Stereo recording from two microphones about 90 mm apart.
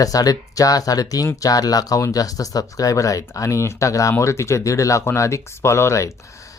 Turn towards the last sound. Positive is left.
turn(degrees=35)  # may be behind; listen again after turning